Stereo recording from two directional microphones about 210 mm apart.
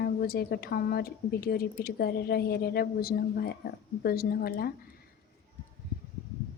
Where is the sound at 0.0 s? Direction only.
45° left (ahead or behind).